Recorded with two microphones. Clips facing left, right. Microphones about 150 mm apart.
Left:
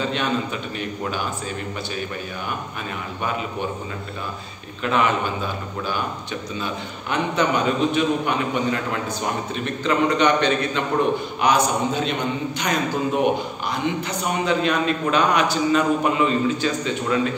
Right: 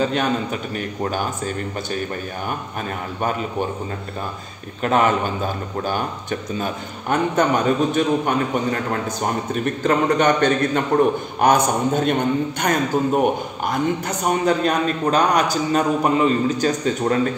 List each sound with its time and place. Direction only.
0.0 s a man's voice: 45° right (ahead or behind)
4.8 s a man's voice: 45° right (ahead or behind)
6.6 s a man's voice: 45° right (ahead or behind)